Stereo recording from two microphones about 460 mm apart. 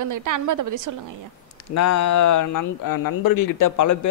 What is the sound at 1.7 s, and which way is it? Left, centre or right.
Speech, left.